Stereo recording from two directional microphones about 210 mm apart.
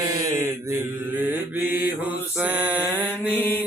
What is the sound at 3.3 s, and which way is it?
Mantra, 10° left (ahead or behind).